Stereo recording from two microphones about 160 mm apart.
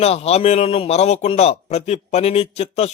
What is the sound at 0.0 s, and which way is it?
A man's voice, 40° left (ahead or behind).